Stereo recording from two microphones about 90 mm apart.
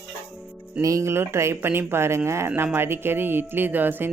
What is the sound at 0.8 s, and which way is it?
Speech, 35° right (ahead or behind).